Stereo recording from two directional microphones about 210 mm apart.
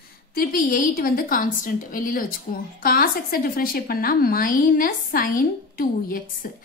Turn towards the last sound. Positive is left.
turn(degrees=40)  # may be behind; listen again after turning